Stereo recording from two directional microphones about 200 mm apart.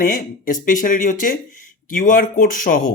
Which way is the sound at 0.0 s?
45° left (ahead or behind).